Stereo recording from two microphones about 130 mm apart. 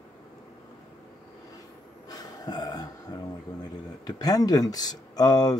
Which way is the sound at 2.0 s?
30° left (ahead or behind).